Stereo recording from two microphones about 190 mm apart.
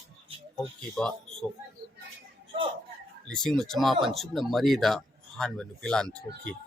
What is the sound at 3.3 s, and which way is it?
Speech, 5° left (ahead or behind).